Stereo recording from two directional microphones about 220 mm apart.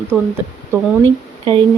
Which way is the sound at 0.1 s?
5° right (ahead or behind).